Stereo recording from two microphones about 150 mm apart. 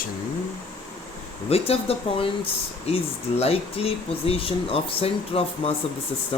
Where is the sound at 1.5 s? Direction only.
40° left (ahead or behind).